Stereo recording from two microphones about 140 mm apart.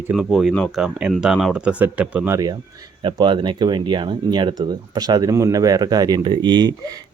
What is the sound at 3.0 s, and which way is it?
Speech, 35° right (ahead or behind).